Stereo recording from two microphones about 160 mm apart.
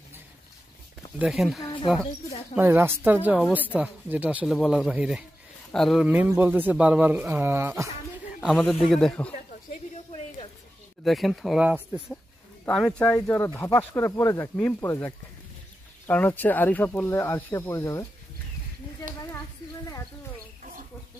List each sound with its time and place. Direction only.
1.2 s speech: centre (ahead or behind)
2.5 s speech: 15° right (ahead or behind); by 6.0 s centre (ahead or behind)
6.0 s speech: 10° right (ahead or behind)
8.4 s speech: centre (ahead or behind)
9.3 s a sound: 50° left (ahead or behind)
11.1 s speech: centre (ahead or behind)
12.6 s speech: 5° left (ahead or behind)